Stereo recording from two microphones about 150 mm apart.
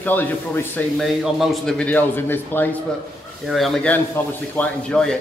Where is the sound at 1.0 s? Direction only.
Centre (ahead or behind).